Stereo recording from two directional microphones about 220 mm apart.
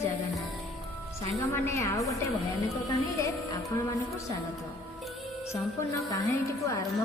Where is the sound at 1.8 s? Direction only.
15° left (ahead or behind).